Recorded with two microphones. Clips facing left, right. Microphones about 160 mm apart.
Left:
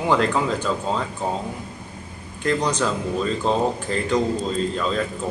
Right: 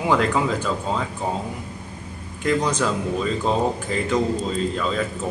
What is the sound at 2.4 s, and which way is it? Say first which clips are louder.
Speech: right 1 dB; 5° right (ahead or behind).